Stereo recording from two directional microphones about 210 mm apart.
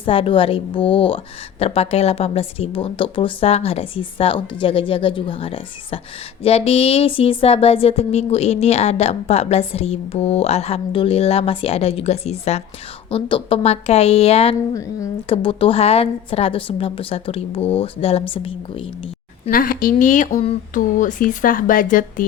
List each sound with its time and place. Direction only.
0.0 s speech: 25° left (ahead or behind)
14.7 s a woman's voice: 15° left (ahead or behind)
15.3 s speech: 25° left (ahead or behind)
19.5 s speech: 45° left (ahead or behind)